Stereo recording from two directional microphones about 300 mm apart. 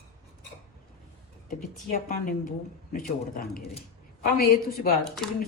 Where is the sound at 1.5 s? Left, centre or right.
Left.